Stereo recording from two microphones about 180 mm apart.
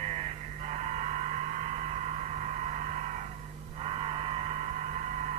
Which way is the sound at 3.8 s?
35° right (ahead or behind).